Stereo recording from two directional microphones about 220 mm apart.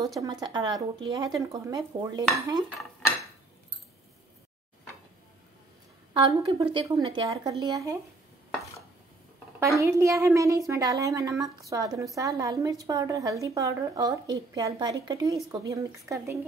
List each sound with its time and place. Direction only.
0.2 s a woman's voice: 20° right (ahead or behind)
6.1 s a woman's voice: 20° right (ahead or behind)
9.6 s a woman's voice: 15° right (ahead or behind)